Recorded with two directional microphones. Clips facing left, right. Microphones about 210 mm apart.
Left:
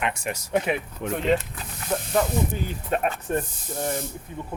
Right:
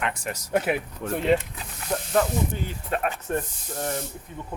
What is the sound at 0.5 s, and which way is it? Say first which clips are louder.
Speech: right 1 dB; 5° right (ahead or behind).